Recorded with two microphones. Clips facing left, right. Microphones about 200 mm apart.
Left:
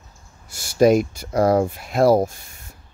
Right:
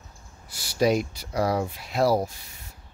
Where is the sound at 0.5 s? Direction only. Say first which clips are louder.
Left 7 dB; 50° left (ahead or behind).